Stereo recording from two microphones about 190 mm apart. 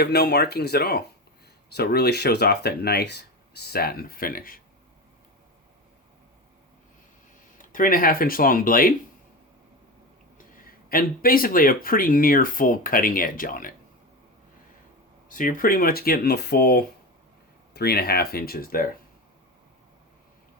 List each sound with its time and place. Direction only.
0.0 s speech: 60° left (ahead or behind)
7.6 s speech: 45° left (ahead or behind)
10.3 s speech: 50° left (ahead or behind)
15.3 s speech: 45° left (ahead or behind)